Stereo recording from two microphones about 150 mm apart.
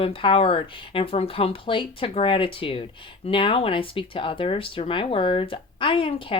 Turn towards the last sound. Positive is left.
turn(degrees=35)  # may be behind; listen again after turning